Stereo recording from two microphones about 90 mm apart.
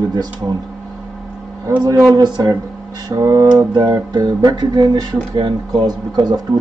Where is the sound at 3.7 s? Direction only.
50° right (ahead or behind).